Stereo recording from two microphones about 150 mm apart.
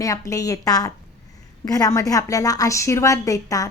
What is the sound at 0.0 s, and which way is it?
A woman's voice, 20° left (ahead or behind).